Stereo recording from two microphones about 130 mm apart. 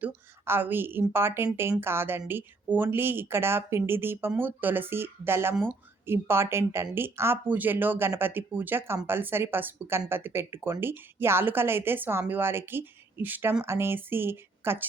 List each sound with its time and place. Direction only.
0.0 s a woman's voice: 15° right (ahead or behind)